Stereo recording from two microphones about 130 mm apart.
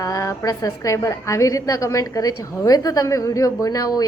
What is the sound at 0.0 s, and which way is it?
A woman's voice, 25° left (ahead or behind).